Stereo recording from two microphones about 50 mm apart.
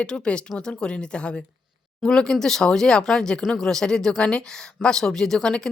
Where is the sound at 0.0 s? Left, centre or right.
Left.